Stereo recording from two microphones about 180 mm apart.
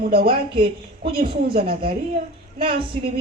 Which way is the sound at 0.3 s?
30° right (ahead or behind).